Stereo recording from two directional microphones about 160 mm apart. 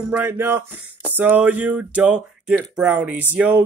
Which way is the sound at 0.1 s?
15° right (ahead or behind).